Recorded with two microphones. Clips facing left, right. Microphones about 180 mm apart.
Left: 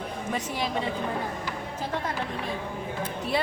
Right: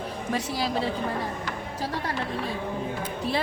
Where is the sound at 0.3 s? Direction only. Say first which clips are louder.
Right 2 dB; 35° right (ahead or behind).